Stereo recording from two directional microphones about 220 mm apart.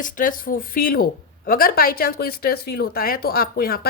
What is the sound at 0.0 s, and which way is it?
Speech, 40° left (ahead or behind).